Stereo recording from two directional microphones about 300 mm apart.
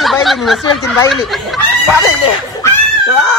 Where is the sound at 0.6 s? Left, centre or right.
Centre.